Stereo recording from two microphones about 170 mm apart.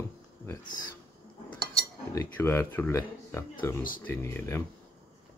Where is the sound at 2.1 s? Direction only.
15° left (ahead or behind).